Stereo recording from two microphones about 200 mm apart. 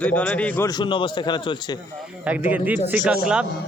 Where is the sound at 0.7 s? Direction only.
25° left (ahead or behind).